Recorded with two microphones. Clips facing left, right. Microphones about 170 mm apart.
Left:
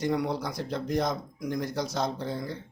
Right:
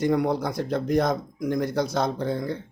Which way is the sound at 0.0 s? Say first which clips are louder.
Right 5 dB; 50° right (ahead or behind).